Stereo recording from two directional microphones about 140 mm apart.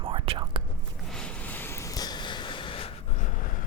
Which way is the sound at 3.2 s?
70° left (ahead or behind).